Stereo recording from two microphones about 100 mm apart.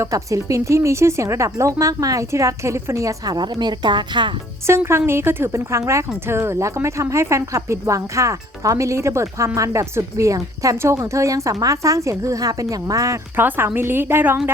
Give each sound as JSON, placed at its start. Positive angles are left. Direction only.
{"t": 0.0, "sound": "a woman's voice", "side_deg": -35}
{"t": 4.9, "sound": "a woman's voice", "side_deg": -25}
{"t": 13.3, "sound": "speech", "side_deg": -20}